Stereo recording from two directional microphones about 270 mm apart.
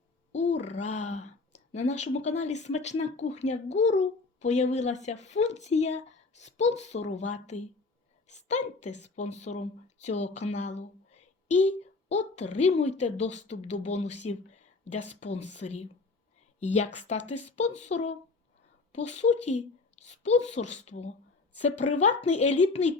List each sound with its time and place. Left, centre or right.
0.3 s a woman's voice: left